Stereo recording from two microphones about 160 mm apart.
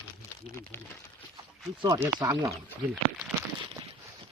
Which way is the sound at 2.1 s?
20° right (ahead or behind).